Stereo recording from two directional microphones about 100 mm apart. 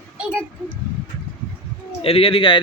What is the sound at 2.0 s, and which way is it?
Speech, 70° left (ahead or behind).